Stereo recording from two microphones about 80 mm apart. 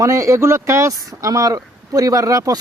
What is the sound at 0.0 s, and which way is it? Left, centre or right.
A man's voice, right.